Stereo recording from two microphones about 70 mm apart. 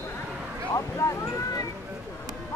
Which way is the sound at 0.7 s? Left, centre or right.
Left.